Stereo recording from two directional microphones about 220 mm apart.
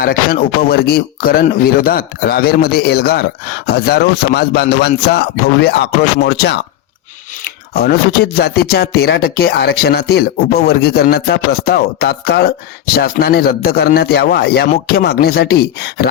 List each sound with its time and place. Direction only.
0.0 s speech: 40° left (ahead or behind)
7.7 s speech: 45° left (ahead or behind)